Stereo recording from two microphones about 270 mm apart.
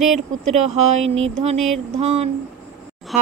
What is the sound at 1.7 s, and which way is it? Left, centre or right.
Speech, right.